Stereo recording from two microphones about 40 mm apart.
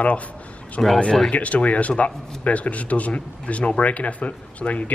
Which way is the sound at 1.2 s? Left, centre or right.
Left.